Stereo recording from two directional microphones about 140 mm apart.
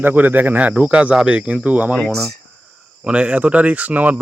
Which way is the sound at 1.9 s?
5° left (ahead or behind).